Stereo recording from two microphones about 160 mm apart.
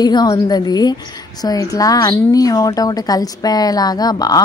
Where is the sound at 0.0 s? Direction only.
25° left (ahead or behind).